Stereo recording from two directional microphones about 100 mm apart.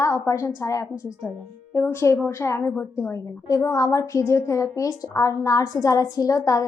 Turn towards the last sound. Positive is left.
turn(degrees=35)  # may be behind; listen again after turning